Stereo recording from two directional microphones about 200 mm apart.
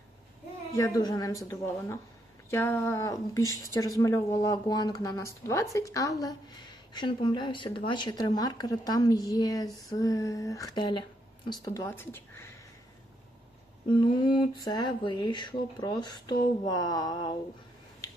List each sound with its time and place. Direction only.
0.7 s a woman's voice: 15° left (ahead or behind)
14.0 s a woman's voice: 25° left (ahead or behind)